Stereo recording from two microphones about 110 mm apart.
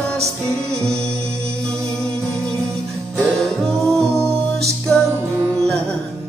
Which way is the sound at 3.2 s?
5° left (ahead or behind).